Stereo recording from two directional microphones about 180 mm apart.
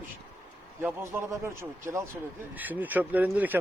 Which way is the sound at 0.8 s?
15° right (ahead or behind).